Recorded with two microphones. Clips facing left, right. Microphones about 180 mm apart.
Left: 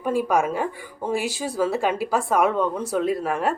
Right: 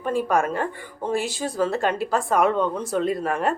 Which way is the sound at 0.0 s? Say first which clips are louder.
Left 1 dB; 10° left (ahead or behind).